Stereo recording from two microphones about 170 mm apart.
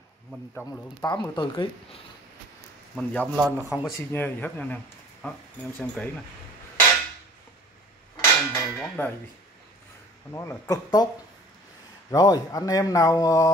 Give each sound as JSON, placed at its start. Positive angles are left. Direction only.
{"t": 0.7, "sound": "speech", "side_deg": 25}
{"t": 3.0, "sound": "speech", "side_deg": 10}
{"t": 3.3, "sound": "speech", "side_deg": -15}
{"t": 4.1, "sound": "speech", "side_deg": 10}
{"t": 8.2, "sound": "clang", "side_deg": 15}
{"t": 10.3, "sound": "speech", "side_deg": 15}
{"t": 12.1, "sound": "speech", "side_deg": 20}